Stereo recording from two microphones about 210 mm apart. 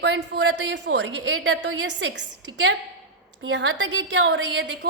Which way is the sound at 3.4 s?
60° right (ahead or behind).